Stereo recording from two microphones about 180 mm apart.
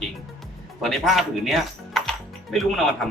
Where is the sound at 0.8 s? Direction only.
Centre (ahead or behind).